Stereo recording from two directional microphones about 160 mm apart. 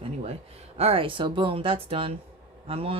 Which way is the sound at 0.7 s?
35° right (ahead or behind).